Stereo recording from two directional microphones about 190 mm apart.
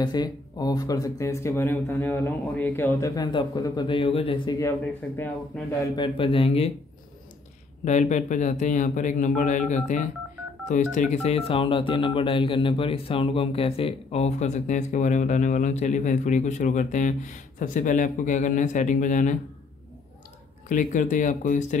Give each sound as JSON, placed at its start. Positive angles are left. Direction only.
{"t": 0.0, "sound": "speech", "side_deg": 20}
{"t": 4.6, "sound": "speech", "side_deg": 15}
{"t": 7.8, "sound": "speech", "side_deg": 40}
{"t": 20.6, "sound": "speech", "side_deg": 45}